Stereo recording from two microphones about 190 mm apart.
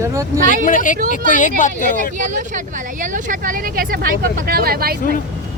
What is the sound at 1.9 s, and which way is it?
Speech, 40° right (ahead or behind).